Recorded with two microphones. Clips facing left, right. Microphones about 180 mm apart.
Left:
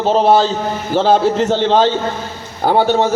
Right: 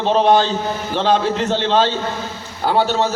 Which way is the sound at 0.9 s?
45° left (ahead or behind).